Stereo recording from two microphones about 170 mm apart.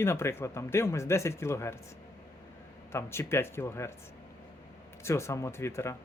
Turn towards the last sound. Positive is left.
turn(degrees=15)  # may be behind; listen again after turning